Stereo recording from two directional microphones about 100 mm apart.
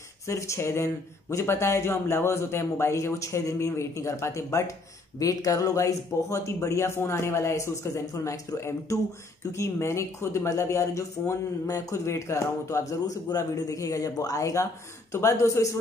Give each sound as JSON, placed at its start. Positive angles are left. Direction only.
{"t": 0.3, "sound": "speech", "side_deg": 30}